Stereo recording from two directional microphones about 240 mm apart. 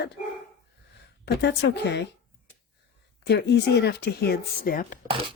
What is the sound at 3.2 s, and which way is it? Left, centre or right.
Speech, left.